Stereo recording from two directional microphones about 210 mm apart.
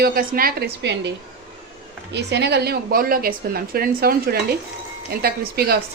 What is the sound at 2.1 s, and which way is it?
A woman's voice, 55° right (ahead or behind).